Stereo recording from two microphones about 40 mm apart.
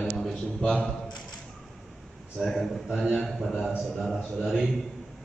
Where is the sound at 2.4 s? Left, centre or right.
Centre.